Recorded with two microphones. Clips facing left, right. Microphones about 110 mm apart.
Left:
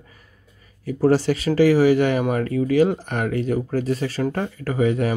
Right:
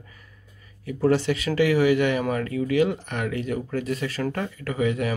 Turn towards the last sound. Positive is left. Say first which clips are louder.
# left 4 dB
turn(degrees=35)  # may be behind; listen again after turning